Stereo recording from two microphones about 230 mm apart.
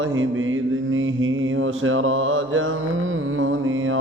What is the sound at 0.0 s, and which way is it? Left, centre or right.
Mantra, right.